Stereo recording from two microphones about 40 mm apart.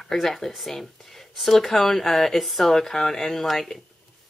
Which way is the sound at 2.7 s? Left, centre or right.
Centre.